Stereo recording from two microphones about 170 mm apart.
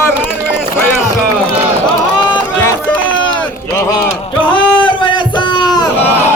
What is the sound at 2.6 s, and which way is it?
Music, 15° left (ahead or behind).